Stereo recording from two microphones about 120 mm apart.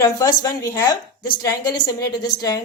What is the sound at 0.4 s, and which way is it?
A woman's voice, 30° left (ahead or behind).